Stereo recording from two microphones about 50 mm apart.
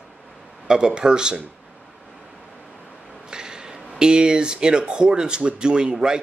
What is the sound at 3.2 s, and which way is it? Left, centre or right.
Speech, centre.